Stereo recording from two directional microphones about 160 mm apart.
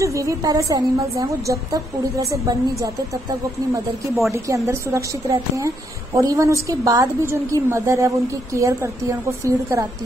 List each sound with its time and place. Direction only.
0.0 s a woman's voice: 20° right (ahead or behind)
4.6 s a woman's voice: 20° right (ahead or behind)